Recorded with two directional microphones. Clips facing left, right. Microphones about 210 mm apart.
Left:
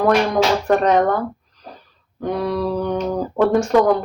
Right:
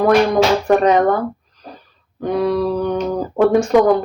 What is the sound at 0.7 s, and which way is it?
Speech, centre (ahead or behind).